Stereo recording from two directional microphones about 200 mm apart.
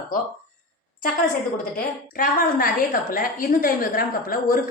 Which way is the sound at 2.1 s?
45° left (ahead or behind).